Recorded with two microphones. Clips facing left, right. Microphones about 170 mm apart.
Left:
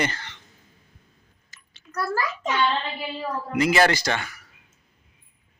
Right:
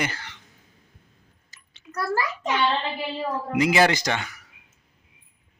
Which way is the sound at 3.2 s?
20° right (ahead or behind).